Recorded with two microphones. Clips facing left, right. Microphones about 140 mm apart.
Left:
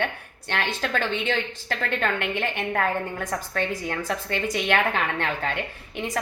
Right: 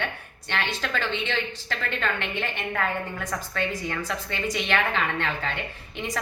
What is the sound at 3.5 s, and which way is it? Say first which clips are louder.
A woman's voice: left 1 dB; 45° left (ahead or behind).